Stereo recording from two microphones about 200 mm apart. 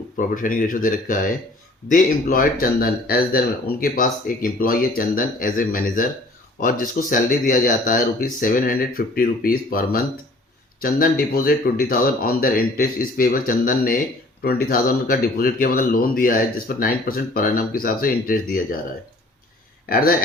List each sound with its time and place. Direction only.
0.2 s speech: 45° left (ahead or behind)